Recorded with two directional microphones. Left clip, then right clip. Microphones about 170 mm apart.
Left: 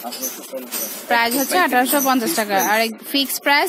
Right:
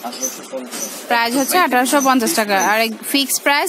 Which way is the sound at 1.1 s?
10° right (ahead or behind).